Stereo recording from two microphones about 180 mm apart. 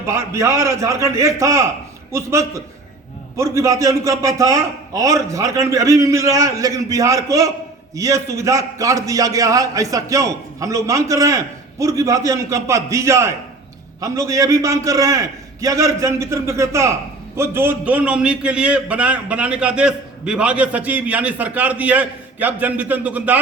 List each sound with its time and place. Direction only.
0.0 s a man's voice: 15° right (ahead or behind)